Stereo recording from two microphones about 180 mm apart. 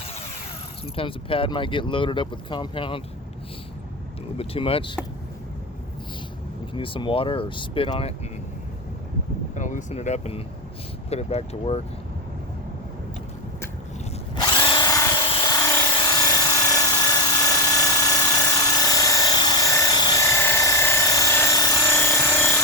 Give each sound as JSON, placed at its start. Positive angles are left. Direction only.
{"t": 0.9, "sound": "speech", "side_deg": 30}
{"t": 4.4, "sound": "speech", "side_deg": 30}
{"t": 6.7, "sound": "speech", "side_deg": 30}
{"t": 9.6, "sound": "speech", "side_deg": 45}
{"t": 14.3, "sound": "drill", "side_deg": 25}